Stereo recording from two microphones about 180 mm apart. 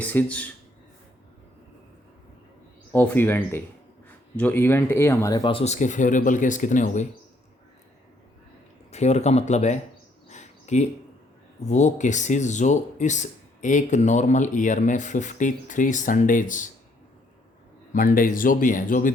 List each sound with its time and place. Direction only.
0.0 s speech: 10° left (ahead or behind)
2.9 s speech: 10° left (ahead or behind); by 7.1 s 45° left (ahead or behind)
8.9 s speech: 40° left (ahead or behind)
10.2 s a sound: 40° left (ahead or behind)
11.6 s speech: 40° left (ahead or behind)
17.9 s speech: 50° left (ahead or behind)